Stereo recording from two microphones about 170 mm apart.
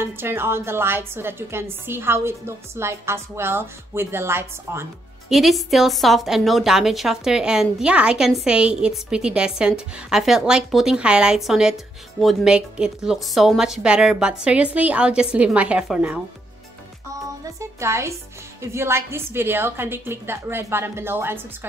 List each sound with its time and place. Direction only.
0.2 s a woman's voice: 15° right (ahead or behind)
5.3 s a woman's voice: centre (ahead or behind)
17.6 s a woman's voice: 15° right (ahead or behind)